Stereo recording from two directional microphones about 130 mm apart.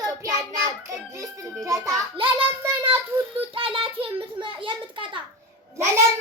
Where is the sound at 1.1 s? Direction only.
25° right (ahead or behind).